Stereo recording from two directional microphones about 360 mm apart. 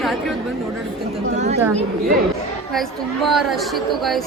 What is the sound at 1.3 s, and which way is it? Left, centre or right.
Chatter, centre.